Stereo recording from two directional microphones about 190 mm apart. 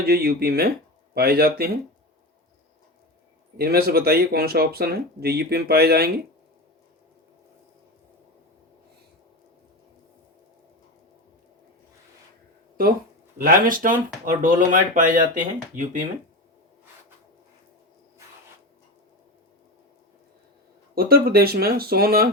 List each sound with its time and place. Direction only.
0.0 s speech: 55° right (ahead or behind)
3.6 s speech: 55° right (ahead or behind)
13.4 s speech: 45° right (ahead or behind)
20.9 s speech: 55° right (ahead or behind)